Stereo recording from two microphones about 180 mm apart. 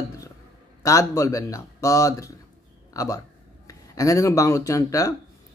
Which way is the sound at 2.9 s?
20° left (ahead or behind).